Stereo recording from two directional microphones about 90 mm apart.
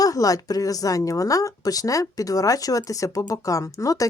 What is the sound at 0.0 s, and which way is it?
A woman's voice, 40° left (ahead or behind).